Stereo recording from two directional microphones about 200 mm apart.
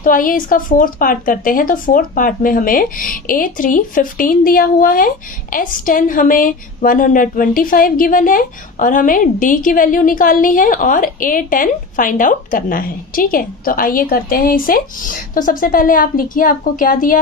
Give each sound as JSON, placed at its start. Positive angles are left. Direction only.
{"t": 0.0, "sound": "speech", "side_deg": 45}